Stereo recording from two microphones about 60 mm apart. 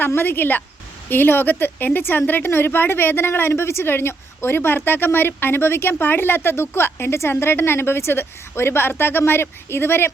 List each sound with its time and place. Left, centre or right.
0.2 s speech: left